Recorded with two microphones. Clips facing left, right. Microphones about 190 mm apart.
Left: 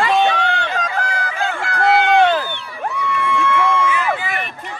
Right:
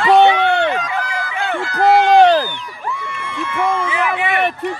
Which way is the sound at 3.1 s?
70° left (ahead or behind).